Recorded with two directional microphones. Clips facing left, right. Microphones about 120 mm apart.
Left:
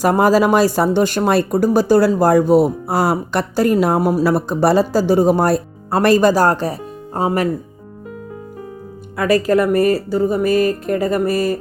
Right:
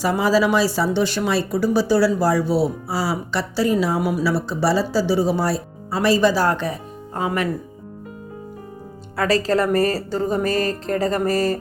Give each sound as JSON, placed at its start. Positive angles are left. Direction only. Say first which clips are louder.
{"t": 0.0, "sound": "speech", "louder": "left 5 dB", "side_deg": 50}
{"t": 9.1, "sound": "a woman's voice", "louder": "left 4 dB", "side_deg": 15}